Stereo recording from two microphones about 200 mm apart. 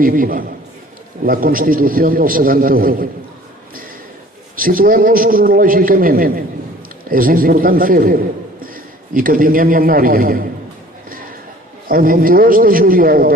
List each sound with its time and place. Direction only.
0.0 s a man's voice: 45° right (ahead or behind)
4.6 s a man's voice: 45° right (ahead or behind)
11.9 s a man's voice: 45° right (ahead or behind)